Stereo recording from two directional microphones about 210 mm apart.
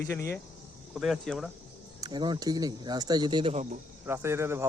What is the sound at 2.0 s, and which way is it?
Speech, 20° right (ahead or behind).